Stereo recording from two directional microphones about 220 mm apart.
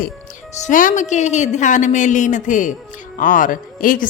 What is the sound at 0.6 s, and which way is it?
A woman's voice, 35° left (ahead or behind).